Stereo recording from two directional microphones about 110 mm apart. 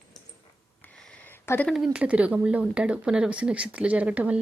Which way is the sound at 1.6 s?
5° right (ahead or behind).